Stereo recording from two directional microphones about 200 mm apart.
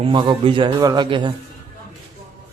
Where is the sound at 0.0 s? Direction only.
25° right (ahead or behind).